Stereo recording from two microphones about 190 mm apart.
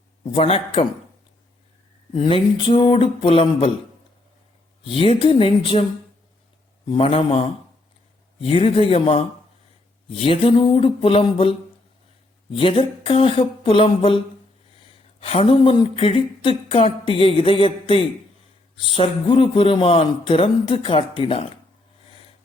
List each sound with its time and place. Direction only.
0.3 s speech: 30° left (ahead or behind)
2.1 s speech: 25° left (ahead or behind)
4.9 s speech: 30° left (ahead or behind)
6.9 s speech: 30° left (ahead or behind)
12.5 s speech: 30° left (ahead or behind)
15.2 s speech: 30° left (ahead or behind)